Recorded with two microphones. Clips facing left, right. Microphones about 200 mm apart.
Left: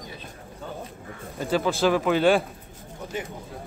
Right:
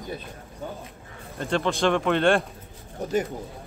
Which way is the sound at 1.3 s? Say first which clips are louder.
Left 1 dB; 5° left (ahead or behind).